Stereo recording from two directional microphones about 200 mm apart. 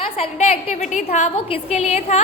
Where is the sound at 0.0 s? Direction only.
30° left (ahead or behind).